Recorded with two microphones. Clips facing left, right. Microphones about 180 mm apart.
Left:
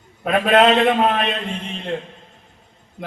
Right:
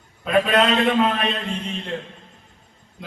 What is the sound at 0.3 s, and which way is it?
Speech, 55° left (ahead or behind).